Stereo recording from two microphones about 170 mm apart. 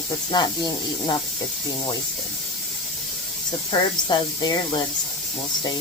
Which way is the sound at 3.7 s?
25° left (ahead or behind).